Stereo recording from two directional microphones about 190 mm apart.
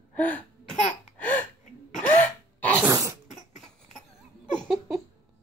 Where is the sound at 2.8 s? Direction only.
15° right (ahead or behind).